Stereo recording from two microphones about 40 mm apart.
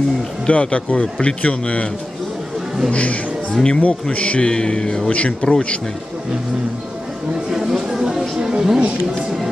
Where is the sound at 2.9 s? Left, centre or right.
Left.